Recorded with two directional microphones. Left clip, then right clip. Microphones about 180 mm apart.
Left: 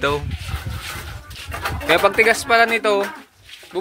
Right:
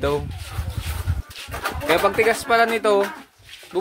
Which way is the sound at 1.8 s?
Centre (ahead or behind).